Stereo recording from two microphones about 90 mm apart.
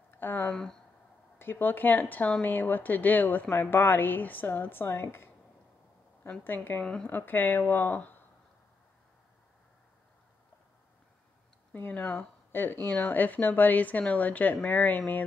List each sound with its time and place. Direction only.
0.1 s speech: 20° left (ahead or behind)
0.5 s speech: 10° left (ahead or behind)
1.4 s speech: 25° left (ahead or behind)
6.4 s speech: 25° left (ahead or behind)
6.8 s speech: 10° left (ahead or behind)
7.1 s speech: 20° left (ahead or behind)
11.7 s speech: 20° left (ahead or behind)